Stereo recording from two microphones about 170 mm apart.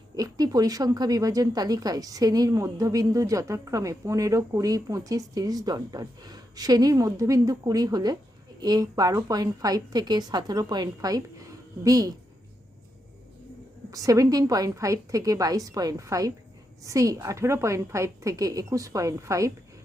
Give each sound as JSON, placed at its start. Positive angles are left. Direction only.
{"t": 0.2, "sound": "speech", "side_deg": -20}
{"t": 13.9, "sound": "speech", "side_deg": -20}